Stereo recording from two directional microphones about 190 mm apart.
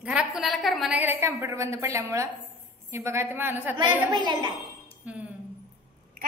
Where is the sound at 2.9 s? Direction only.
15° right (ahead or behind).